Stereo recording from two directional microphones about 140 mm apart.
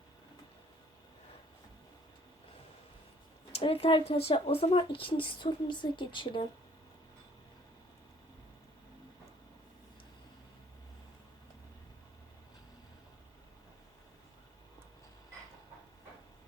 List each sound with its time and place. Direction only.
3.5 s speech: 45° left (ahead or behind)